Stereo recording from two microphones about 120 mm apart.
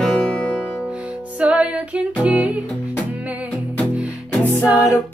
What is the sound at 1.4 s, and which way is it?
Music, 10° right (ahead or behind).